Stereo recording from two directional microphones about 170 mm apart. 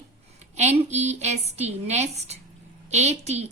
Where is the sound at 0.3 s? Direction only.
40° right (ahead or behind).